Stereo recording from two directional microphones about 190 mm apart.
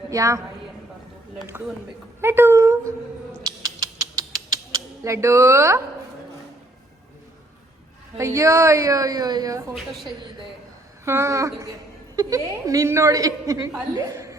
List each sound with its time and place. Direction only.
0.1 s a woman's voice: 15° right (ahead or behind)
1.5 s a woman's voice: 10° right (ahead or behind)
3.4 s rodents: 20° right (ahead or behind)
4.7 s speech: 15° right (ahead or behind)
8.2 s a woman's voice: 15° right (ahead or behind)
9.7 s a woman's voice: centre (ahead or behind)
11.0 s a woman's voice: 15° right (ahead or behind)